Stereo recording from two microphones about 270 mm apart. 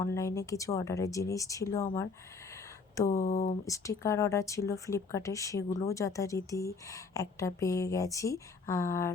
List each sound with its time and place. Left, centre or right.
0.0 s speech: centre
3.1 s speech: left
3.7 s speech: centre